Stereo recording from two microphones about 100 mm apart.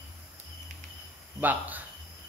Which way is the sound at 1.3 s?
15° right (ahead or behind).